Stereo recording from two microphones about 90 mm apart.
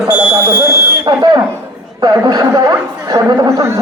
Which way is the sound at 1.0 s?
45° right (ahead or behind).